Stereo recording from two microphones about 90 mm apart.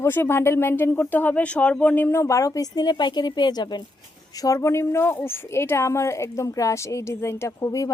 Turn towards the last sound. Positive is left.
turn(degrees=35)  # may be behind; listen again after turning